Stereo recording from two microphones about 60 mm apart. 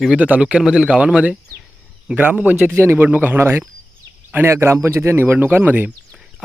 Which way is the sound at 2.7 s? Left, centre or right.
Right.